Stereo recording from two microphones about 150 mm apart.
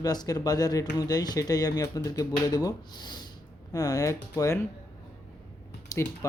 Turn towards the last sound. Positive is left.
turn(degrees=25)  # may be behind; listen again after turning